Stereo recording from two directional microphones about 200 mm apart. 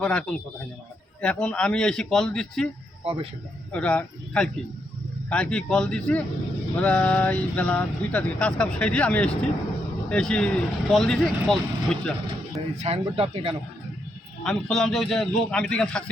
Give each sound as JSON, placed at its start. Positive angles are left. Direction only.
{"t": 0.0, "sound": "speech", "side_deg": 5}
{"t": 3.0, "sound": "speech", "side_deg": -30}
{"t": 3.7, "sound": "speech", "side_deg": 5}
{"t": 12.8, "sound": "speech", "side_deg": -30}
{"t": 14.4, "sound": "speech", "side_deg": 0}